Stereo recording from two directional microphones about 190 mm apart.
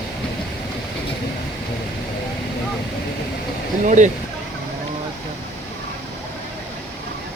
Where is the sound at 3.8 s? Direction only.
40° right (ahead or behind).